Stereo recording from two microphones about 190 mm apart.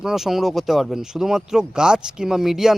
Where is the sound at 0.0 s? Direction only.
Centre (ahead or behind).